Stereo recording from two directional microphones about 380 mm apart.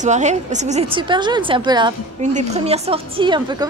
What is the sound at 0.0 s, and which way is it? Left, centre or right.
A woman's voice, centre.